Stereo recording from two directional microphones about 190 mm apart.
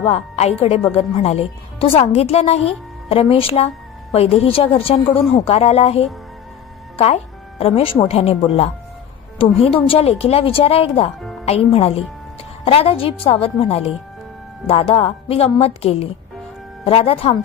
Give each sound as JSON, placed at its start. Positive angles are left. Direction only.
{"t": 0.0, "sound": "a woman's voice", "side_deg": 35}
{"t": 9.4, "sound": "a woman's voice", "side_deg": 30}